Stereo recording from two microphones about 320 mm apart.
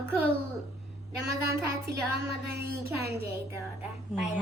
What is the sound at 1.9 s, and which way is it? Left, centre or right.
Speech, right.